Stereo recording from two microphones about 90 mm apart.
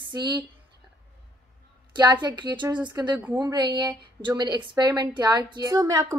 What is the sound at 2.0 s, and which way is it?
A woman's voice, 55° right (ahead or behind).